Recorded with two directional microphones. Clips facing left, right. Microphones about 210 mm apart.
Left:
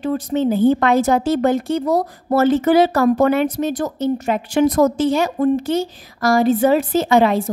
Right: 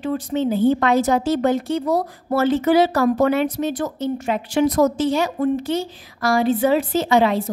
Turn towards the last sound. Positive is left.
turn(degrees=50)  # may be behind; listen again after turning